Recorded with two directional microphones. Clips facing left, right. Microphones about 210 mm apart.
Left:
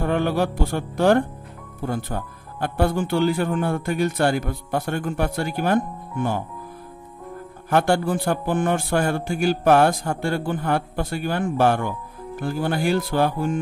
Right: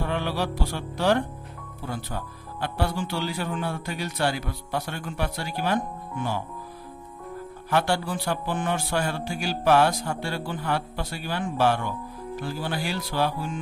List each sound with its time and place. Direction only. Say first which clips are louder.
0.0 s speech: left 6 dB; 50° left (ahead or behind)
7.7 s speech: left 5 dB; 50° left (ahead or behind)